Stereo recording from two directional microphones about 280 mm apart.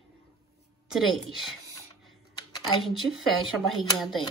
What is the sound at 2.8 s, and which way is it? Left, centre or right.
Speech, centre.